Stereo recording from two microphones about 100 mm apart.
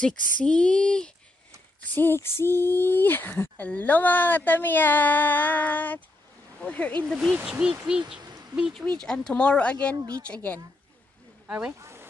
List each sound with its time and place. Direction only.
0.0 s speech: 10° left (ahead or behind)
2.0 s speech: 25° left (ahead or behind)
7.1 s speech: centre (ahead or behind)
8.2 s a sound: 40° right (ahead or behind)
9.0 s speech: 10° left (ahead or behind)
9.9 s speech: 35° right (ahead or behind)
10.2 s speech: 15° left (ahead or behind)
11.4 s speech: 10° right (ahead or behind)
11.8 s a sound: 25° right (ahead or behind)